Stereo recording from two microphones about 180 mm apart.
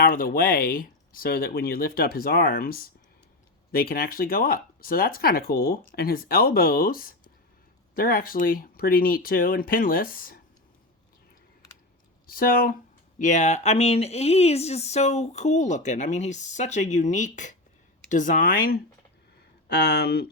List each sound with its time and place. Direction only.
0.0 s speech: 55° left (ahead or behind)
12.3 s speech: 55° left (ahead or behind)
19.6 s speech: 65° left (ahead or behind)